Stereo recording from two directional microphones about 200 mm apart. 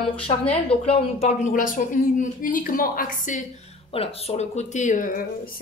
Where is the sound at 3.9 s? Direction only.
30° left (ahead or behind); by 5.5 s 45° left (ahead or behind).